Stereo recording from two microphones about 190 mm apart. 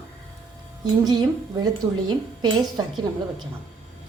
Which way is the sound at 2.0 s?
20° right (ahead or behind).